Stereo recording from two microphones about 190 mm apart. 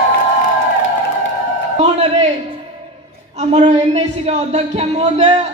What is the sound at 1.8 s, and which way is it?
Speech, 35° right (ahead or behind).